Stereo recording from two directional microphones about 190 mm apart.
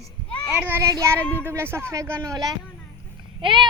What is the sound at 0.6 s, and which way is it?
Speech, 10° right (ahead or behind).